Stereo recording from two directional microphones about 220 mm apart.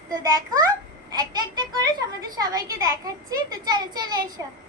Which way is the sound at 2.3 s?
15° right (ahead or behind).